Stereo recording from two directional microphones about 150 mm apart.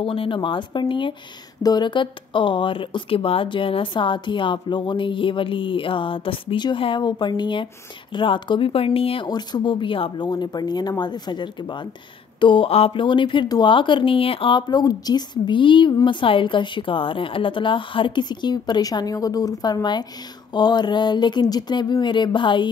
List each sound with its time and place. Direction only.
0.0 s speech: 35° left (ahead or behind)